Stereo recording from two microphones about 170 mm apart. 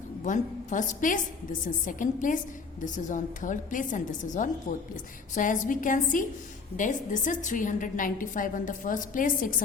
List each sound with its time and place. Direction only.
0.3 s a woman's voice: 50° left (ahead or behind)